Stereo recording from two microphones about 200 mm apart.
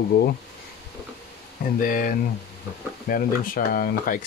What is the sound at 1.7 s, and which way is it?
Speech, 45° left (ahead or behind).